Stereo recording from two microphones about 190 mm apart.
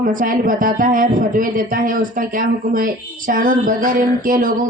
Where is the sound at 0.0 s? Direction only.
45° right (ahead or behind).